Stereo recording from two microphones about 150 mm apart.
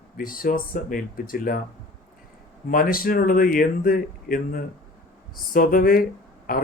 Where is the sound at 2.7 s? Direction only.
75° left (ahead or behind).